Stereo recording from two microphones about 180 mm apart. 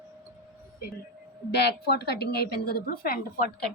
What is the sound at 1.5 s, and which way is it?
A woman's voice, 65° left (ahead or behind).